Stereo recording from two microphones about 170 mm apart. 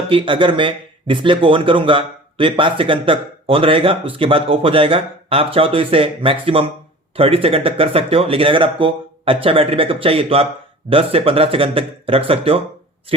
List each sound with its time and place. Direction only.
0.1 s speech: 30° right (ahead or behind)